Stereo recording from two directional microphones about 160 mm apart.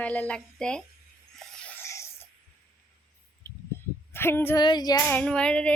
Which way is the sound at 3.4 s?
15° left (ahead or behind).